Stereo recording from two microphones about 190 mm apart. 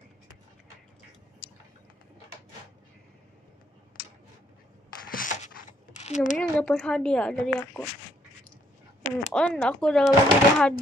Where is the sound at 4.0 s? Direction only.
60° left (ahead or behind).